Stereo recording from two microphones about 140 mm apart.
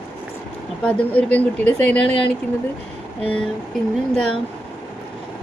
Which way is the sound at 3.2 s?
40° left (ahead or behind).